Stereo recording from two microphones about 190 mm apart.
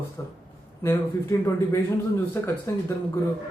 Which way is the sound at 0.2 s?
15° left (ahead or behind).